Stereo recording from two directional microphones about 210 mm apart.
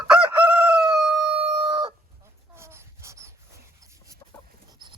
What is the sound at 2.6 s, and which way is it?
Dog, 10° right (ahead or behind).